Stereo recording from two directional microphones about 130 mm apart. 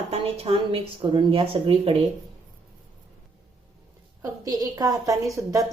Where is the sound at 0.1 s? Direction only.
50° right (ahead or behind).